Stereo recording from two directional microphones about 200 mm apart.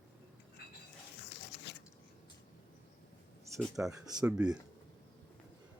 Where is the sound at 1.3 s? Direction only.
60° left (ahead or behind).